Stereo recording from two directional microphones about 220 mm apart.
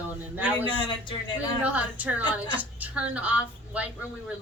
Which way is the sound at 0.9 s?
20° left (ahead or behind).